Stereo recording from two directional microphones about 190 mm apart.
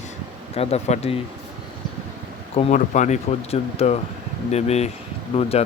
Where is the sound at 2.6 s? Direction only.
40° left (ahead or behind).